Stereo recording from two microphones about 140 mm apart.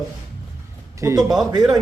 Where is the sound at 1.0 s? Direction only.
20° right (ahead or behind).